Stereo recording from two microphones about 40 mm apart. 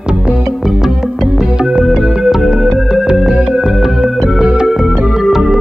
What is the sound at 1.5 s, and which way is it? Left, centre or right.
Music, right.